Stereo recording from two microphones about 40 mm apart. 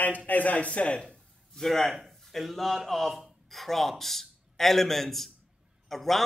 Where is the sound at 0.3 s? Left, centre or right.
Left.